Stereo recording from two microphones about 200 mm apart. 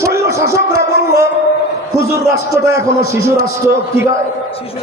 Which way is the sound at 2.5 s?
15° right (ahead or behind).